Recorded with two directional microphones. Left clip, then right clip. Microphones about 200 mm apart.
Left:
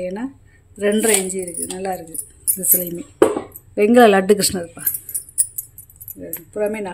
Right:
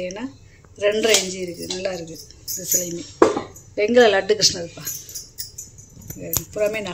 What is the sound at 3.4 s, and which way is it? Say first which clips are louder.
Speech: left 4 dB; 55° left (ahead or behind).